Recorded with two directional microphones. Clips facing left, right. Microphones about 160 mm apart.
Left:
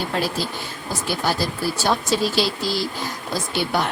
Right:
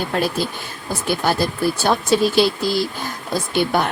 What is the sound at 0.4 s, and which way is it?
Speech, 55° right (ahead or behind).